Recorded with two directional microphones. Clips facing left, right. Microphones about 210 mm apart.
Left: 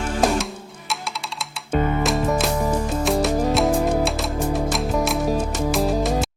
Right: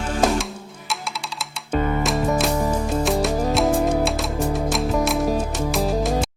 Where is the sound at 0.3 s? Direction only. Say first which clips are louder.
Even; centre (ahead or behind).